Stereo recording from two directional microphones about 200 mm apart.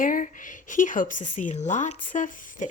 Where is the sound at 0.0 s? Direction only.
40° left (ahead or behind).